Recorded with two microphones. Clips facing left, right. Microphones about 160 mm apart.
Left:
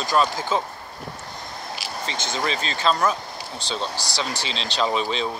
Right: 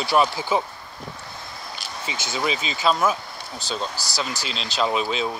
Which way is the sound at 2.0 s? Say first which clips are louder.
Right 1 dB; 10° right (ahead or behind).